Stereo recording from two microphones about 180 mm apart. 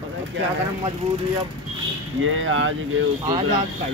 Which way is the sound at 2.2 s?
90° right.